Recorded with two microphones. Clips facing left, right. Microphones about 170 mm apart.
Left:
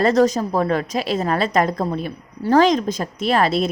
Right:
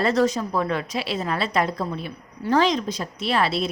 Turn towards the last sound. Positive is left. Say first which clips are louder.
# left 5 dB
turn(degrees=45)  # may be behind; listen again after turning